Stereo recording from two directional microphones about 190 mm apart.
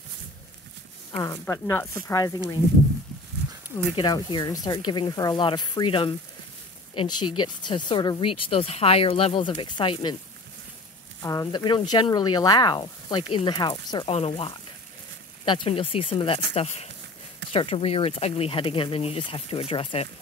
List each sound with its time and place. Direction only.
1.1 s speech: 20° left (ahead or behind)
3.9 s speech: 25° left (ahead or behind)
11.2 s speech: 20° left (ahead or behind)